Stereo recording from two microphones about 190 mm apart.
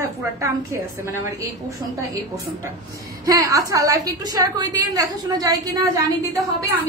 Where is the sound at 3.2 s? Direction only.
15° right (ahead or behind).